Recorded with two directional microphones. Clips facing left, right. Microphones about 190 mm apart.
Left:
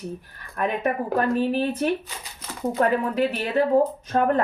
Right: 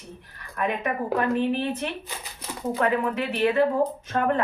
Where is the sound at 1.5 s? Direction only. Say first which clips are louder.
Left 4 dB; 40° left (ahead or behind).